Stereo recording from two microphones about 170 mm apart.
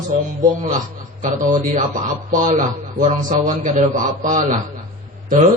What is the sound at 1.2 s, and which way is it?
A man's voice, 50° right (ahead or behind).